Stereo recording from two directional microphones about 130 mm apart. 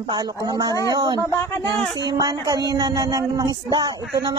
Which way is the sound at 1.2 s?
15° left (ahead or behind).